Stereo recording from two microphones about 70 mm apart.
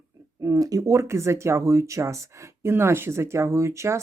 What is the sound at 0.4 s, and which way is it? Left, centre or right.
Speech, right.